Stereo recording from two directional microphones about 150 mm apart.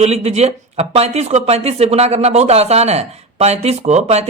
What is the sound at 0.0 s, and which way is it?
Speech, 45° right (ahead or behind).